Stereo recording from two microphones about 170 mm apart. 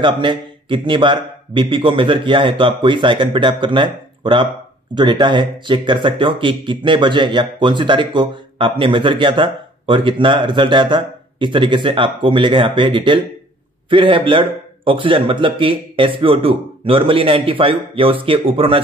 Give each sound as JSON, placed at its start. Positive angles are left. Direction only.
{"t": 0.0, "sound": "speech", "side_deg": -30}